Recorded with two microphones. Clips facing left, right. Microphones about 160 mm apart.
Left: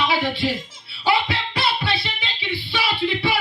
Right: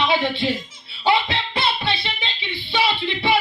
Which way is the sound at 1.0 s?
25° right (ahead or behind).